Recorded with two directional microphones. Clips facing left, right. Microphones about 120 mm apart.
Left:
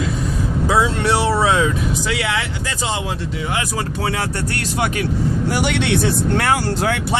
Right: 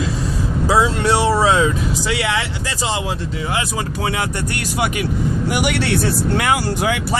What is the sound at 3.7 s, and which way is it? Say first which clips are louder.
Speech: even; 15° right (ahead or behind).